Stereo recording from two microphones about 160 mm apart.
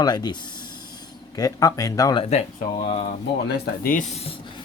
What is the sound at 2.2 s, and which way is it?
Speech, 45° left (ahead or behind).